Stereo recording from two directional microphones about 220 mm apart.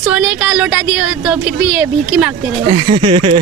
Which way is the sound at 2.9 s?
25° right (ahead or behind).